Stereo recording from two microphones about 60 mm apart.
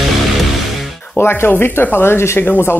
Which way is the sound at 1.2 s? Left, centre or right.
Left.